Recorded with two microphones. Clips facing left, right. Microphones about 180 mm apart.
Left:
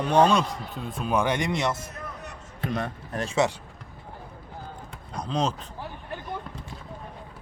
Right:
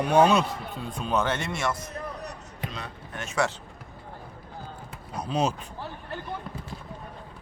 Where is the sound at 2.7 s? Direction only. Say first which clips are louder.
Left 11 dB; 50° left (ahead or behind).